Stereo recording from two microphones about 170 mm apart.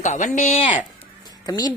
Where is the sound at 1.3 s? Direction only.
25° left (ahead or behind).